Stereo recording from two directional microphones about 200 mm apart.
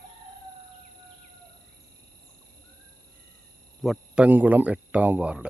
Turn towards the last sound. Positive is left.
turn(degrees=-5)  # may be behind; listen again after turning